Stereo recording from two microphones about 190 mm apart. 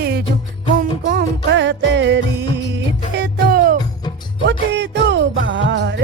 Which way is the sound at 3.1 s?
55° right (ahead or behind).